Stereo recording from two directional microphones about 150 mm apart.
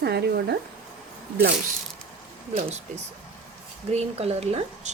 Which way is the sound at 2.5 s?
45° right (ahead or behind).